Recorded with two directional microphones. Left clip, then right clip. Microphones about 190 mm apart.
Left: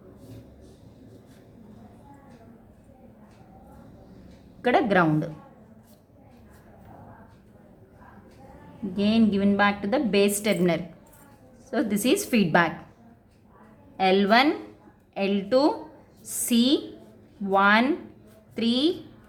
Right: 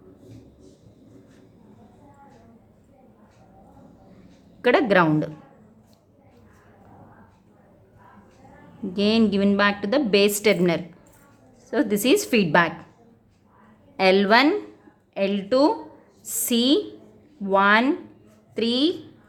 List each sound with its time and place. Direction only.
4.6 s a woman's voice: 25° right (ahead or behind)
8.9 s a woman's voice: 25° right (ahead or behind)
13.9 s a woman's voice: 30° right (ahead or behind)